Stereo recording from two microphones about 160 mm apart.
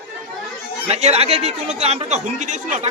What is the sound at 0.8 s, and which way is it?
Speech, 45° right (ahead or behind).